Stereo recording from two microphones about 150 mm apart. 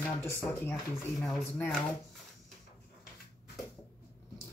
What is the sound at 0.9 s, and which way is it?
Speech, centre (ahead or behind).